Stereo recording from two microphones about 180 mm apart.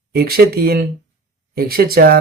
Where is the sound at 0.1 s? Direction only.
60° right (ahead or behind).